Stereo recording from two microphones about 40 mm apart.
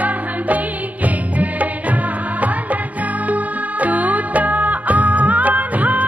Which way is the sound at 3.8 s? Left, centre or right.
Right.